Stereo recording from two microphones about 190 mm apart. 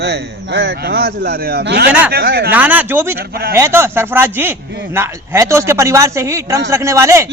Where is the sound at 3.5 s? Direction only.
15° right (ahead or behind).